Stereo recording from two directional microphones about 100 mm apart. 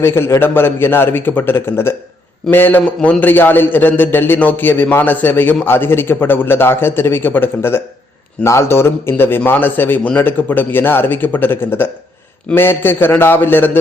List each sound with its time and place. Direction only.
0.0 s a man's voice: 25° left (ahead or behind)